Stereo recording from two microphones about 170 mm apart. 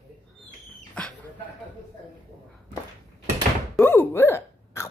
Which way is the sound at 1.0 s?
5° left (ahead or behind).